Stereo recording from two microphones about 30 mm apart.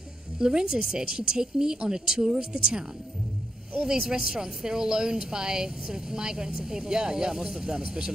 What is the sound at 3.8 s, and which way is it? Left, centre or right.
A woman's voice, right.